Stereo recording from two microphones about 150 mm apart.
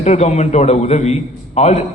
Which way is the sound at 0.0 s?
50° left (ahead or behind).